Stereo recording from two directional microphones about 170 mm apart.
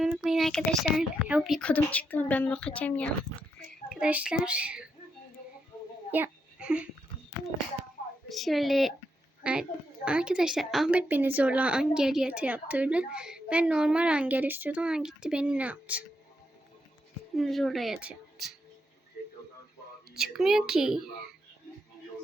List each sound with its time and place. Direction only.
0.0 s speech: 5° right (ahead or behind)
3.8 s a child's voice: 5° right (ahead or behind)
6.1 s a sound: 10° right (ahead or behind)
8.3 s a woman's voice: centre (ahead or behind)
17.3 s speech: centre (ahead or behind)
20.1 s speech: centre (ahead or behind)